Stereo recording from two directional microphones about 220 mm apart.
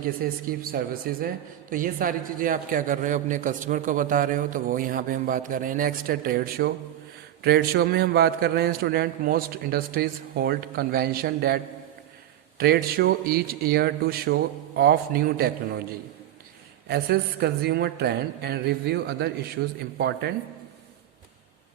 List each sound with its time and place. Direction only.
0.2 s a man's voice: 40° right (ahead or behind)
16.9 s a man's voice: 45° right (ahead or behind)